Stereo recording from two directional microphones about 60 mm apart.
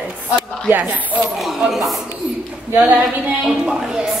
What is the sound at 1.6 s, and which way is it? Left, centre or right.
Speech, centre.